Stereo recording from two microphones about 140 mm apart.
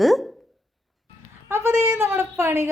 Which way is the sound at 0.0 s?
Centre (ahead or behind).